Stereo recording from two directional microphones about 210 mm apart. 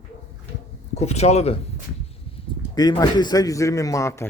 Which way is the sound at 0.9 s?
30° left (ahead or behind).